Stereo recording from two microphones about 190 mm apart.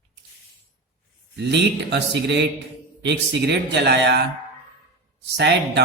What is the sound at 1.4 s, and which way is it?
Speech, 65° right (ahead or behind).